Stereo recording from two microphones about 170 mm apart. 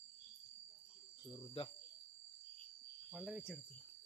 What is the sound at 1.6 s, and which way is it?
Speech, 30° left (ahead or behind).